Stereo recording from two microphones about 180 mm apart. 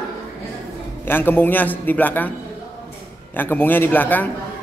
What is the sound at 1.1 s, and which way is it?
Speech, 10° left (ahead or behind).